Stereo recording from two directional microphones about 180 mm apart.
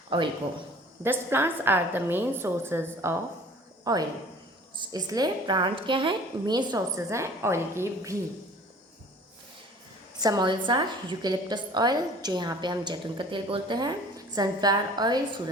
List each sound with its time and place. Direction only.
0.1 s a woman's voice: 30° right (ahead or behind)
1.0 s a woman's voice: 10° right (ahead or behind)
10.2 s a woman's voice: 20° right (ahead or behind)